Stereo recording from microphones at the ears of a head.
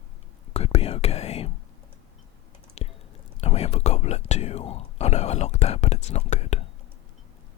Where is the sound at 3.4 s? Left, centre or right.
Left.